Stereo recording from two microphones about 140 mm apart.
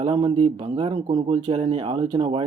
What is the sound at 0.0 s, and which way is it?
A man's voice, 35° right (ahead or behind).